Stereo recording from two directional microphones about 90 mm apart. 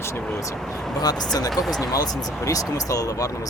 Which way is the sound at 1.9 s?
40° left (ahead or behind).